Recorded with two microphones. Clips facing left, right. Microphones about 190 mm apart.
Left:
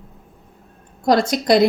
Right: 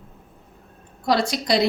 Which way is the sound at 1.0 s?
50° left (ahead or behind).